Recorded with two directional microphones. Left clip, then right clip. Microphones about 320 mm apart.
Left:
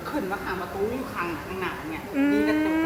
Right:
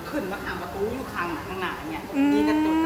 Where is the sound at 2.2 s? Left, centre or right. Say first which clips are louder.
Right 1 dB; centre.